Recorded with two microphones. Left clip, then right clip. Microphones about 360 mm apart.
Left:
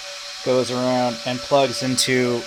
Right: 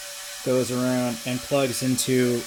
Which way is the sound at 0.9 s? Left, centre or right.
Left.